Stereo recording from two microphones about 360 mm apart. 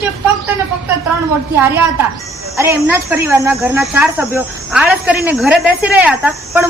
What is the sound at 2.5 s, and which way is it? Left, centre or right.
Speech, centre.